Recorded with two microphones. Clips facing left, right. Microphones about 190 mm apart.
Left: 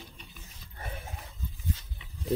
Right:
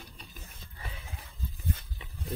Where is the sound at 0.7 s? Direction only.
50° left (ahead or behind).